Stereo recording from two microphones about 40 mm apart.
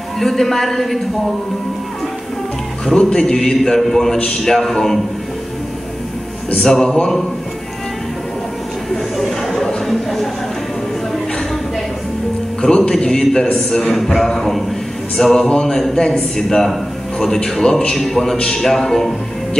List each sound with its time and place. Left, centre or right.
0.2 s a man's voice: centre
2.8 s a man's voice: centre
6.5 s a man's voice: centre
8.9 s a man's voice: centre
12.6 s a man's voice: centre
15.4 s a man's voice: centre